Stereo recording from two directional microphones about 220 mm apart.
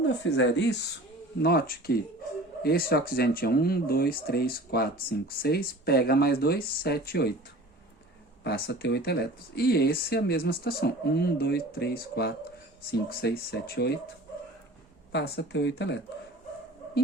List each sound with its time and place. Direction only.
0.0 s speech: 55° left (ahead or behind)
8.4 s speech: 45° left (ahead or behind)
15.1 s speech: 50° left (ahead or behind)